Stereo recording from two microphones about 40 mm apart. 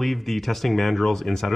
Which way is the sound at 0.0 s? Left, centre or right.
Centre.